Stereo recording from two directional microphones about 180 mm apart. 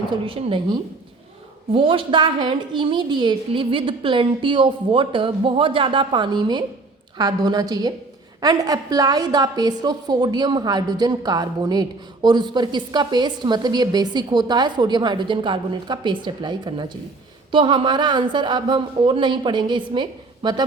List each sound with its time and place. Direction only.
0.1 s a woman's voice: 30° right (ahead or behind)